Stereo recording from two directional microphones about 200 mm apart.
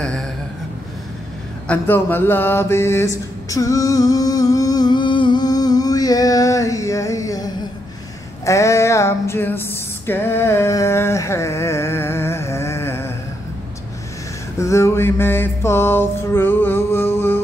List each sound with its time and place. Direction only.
1.7 s mantra: 10° left (ahead or behind)
8.5 s a sound: 15° left (ahead or behind)
14.6 s mantra: 15° left (ahead or behind)